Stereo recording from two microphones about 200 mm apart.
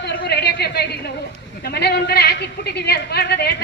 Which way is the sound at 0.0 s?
55° left (ahead or behind).